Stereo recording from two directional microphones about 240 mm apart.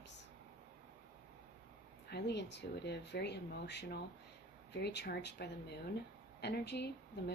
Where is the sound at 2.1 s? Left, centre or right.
Left.